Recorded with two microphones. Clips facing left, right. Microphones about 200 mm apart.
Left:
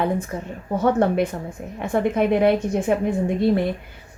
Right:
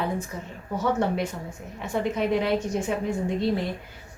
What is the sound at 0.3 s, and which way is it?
A woman's voice, 50° left (ahead or behind).